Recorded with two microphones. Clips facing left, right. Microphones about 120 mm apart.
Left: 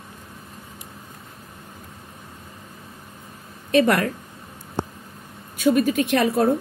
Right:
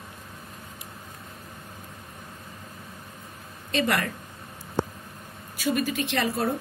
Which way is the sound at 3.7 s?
50° left (ahead or behind).